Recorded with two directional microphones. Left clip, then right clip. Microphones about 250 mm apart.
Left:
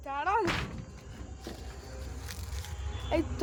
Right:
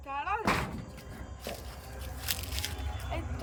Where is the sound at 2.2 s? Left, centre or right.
Right.